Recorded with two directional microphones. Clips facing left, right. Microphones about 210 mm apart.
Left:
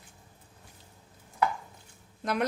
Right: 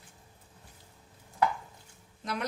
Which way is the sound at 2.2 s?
55° left (ahead or behind).